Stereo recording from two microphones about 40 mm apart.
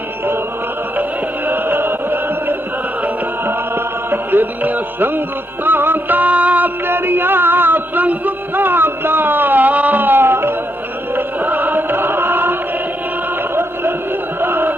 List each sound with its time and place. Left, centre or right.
1.5 s music: right
4.1 s music: right
6.8 s a sound: right
10.0 s music: right
11.1 s music: right
14.4 s music: right